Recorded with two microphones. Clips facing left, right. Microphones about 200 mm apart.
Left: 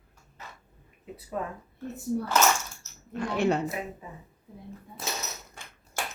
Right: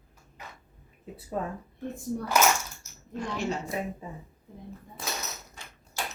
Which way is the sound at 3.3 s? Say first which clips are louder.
Left 7 dB; 60° left (ahead or behind).